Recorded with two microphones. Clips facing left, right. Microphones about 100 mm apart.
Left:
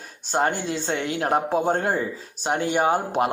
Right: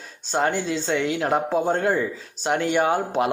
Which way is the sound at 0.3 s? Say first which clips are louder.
Right 1 dB; 45° left (ahead or behind).